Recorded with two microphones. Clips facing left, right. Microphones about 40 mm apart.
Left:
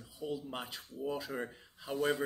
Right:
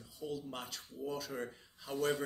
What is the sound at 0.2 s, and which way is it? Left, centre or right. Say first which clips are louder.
Speech: left 2 dB; centre.